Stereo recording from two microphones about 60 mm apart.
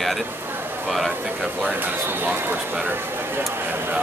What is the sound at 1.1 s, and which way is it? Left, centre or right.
Speech, right.